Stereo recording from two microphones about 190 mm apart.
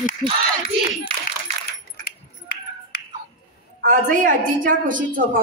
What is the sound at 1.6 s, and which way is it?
Coin, 55° left (ahead or behind).